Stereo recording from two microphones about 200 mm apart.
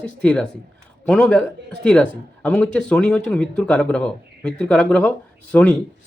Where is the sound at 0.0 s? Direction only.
5° left (ahead or behind).